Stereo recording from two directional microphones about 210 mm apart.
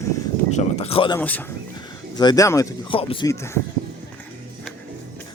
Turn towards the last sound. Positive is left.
turn(degrees=15)  # may be behind; listen again after turning